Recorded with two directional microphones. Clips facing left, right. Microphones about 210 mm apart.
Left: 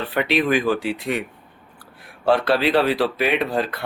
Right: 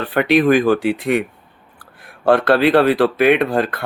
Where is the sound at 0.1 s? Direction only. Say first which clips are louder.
Right 7 dB; 50° right (ahead or behind).